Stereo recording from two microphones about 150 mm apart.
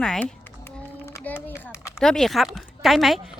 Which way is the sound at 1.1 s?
15° left (ahead or behind).